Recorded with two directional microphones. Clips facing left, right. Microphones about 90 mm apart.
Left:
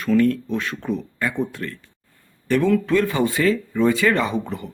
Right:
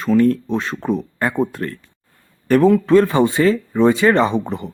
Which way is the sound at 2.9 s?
35° right (ahead or behind).